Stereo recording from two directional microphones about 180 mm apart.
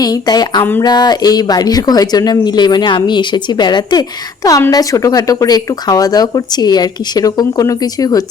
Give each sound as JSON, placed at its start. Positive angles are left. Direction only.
{"t": 0.0, "sound": "speech", "side_deg": 20}
{"t": 0.6, "sound": "speech", "side_deg": 10}
{"t": 0.9, "sound": "speech", "side_deg": 25}